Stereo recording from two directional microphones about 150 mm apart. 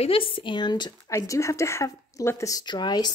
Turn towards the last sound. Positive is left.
turn(degrees=30)  # may be behind; listen again after turning